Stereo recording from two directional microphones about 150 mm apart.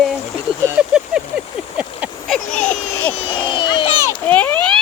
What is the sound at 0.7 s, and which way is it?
Vehicle, 5° right (ahead or behind).